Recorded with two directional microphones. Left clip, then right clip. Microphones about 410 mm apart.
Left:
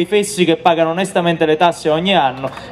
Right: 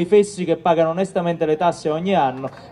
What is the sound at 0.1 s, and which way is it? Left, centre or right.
Speech, centre.